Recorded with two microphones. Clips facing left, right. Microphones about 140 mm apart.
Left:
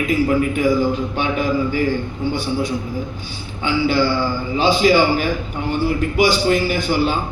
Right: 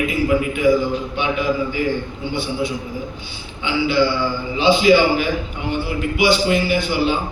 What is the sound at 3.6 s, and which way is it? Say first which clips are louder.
A man's voice: even; 45° left (ahead or behind).